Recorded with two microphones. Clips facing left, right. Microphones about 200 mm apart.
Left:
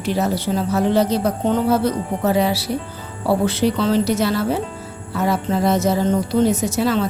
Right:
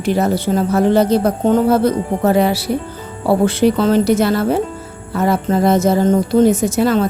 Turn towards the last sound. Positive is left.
turn(degrees=-50)  # may be behind; listen again after turning